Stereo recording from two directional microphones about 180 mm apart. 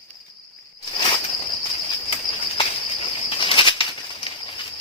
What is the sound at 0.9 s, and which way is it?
Insect, 30° left (ahead or behind).